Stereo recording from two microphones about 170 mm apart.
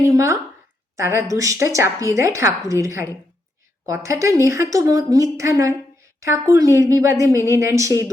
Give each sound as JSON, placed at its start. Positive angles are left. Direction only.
{"t": 0.0, "sound": "speech", "side_deg": -20}